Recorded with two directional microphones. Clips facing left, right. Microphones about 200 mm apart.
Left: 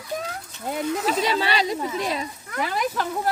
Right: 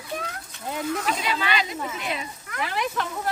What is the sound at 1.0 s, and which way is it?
Speech, 35° left (ahead or behind).